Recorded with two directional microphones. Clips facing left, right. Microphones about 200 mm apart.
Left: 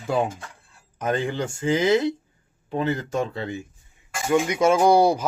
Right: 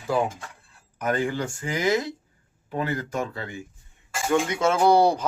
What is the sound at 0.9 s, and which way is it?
Speech, 25° left (ahead or behind).